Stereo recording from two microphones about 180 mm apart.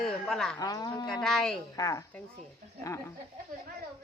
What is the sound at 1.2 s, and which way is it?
Speech, centre (ahead or behind).